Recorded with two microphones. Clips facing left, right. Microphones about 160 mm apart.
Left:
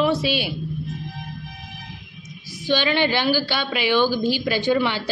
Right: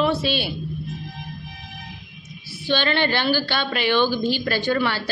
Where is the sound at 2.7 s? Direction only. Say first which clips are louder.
Left 1 dB; 10° left (ahead or behind).